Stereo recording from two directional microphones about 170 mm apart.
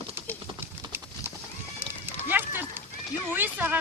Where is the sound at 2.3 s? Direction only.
10° right (ahead or behind).